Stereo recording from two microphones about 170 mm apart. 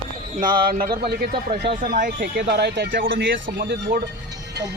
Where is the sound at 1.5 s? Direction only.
75° right (ahead or behind).